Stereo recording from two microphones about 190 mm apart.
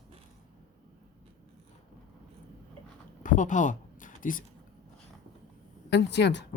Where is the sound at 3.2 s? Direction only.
45° left (ahead or behind).